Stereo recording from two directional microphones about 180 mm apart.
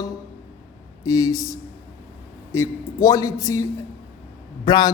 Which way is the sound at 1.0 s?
20° left (ahead or behind).